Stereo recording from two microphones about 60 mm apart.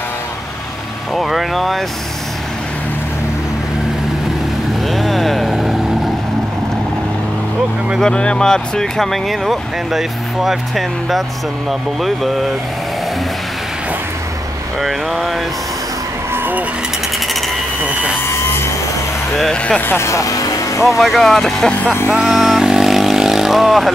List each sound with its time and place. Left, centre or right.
1.1 s speech: centre
4.8 s vehicle: centre
8.0 s speech: centre
14.8 s speech: centre
18.2 s vehicle: left
19.5 s speech: centre
20.0 s music: left
21.0 s speech: centre
22.1 s vehicle: centre